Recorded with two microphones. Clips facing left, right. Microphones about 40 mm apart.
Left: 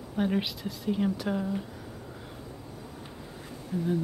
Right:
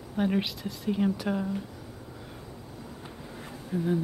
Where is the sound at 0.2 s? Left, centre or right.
Centre.